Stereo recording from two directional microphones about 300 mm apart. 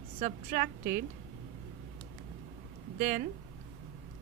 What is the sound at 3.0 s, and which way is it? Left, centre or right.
Speech, right.